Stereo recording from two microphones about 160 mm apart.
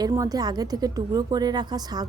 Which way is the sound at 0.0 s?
20° right (ahead or behind).